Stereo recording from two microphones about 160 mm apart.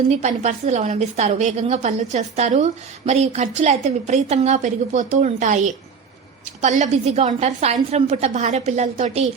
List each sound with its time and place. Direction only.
0.2 s a woman's voice: 45° right (ahead or behind)